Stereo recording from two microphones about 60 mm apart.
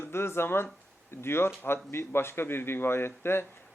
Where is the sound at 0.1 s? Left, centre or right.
Left.